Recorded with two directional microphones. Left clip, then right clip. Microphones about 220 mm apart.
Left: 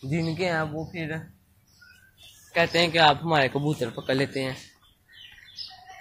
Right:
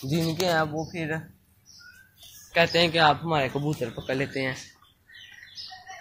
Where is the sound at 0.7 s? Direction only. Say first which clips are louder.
Right 2 dB; 15° right (ahead or behind).